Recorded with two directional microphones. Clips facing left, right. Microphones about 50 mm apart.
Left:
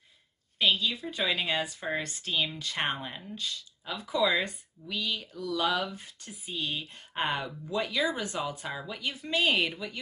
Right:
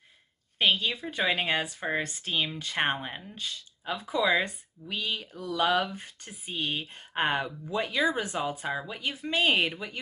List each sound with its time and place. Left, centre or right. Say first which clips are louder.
0.6 s speech: right 1 dB; right